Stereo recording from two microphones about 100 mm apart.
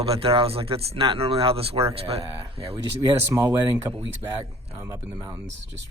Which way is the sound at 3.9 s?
15° right (ahead or behind).